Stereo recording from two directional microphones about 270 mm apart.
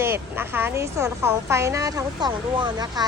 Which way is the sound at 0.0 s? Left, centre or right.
Centre.